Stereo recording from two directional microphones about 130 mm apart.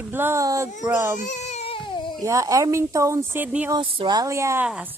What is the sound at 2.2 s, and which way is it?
Speech, 25° right (ahead or behind).